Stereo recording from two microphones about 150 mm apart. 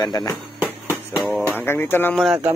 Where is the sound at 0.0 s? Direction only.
25° left (ahead or behind).